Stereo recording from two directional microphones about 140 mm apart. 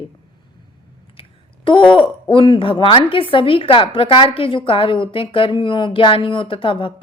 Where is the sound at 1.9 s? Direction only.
35° left (ahead or behind).